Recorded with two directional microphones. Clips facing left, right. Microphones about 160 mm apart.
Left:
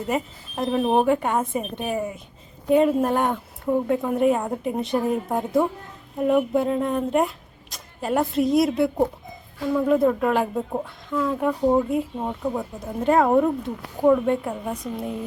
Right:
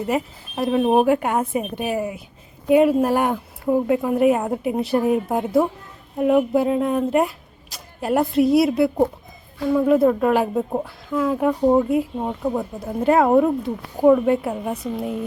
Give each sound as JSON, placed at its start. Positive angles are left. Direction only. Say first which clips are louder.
{"t": 0.1, "sound": "a woman's voice", "louder": "even", "side_deg": 0}